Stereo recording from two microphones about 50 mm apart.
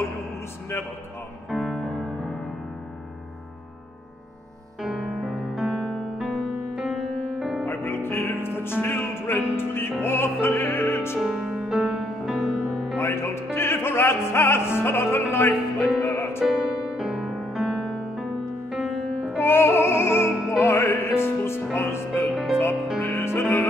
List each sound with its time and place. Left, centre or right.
1.5 s music: centre
1.8 s music: centre
4.8 s music: centre
7.6 s music: left
10.0 s opera: left
11.1 s music: centre
13.0 s music: left
16.4 s music: centre
19.3 s music: left
22.3 s music: centre
22.9 s music: left